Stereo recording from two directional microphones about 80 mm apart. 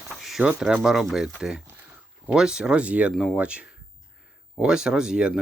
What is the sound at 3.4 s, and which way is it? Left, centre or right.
Speech, centre.